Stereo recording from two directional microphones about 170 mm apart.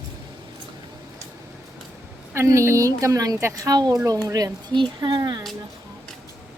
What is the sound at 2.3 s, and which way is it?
A woman's voice, 15° right (ahead or behind).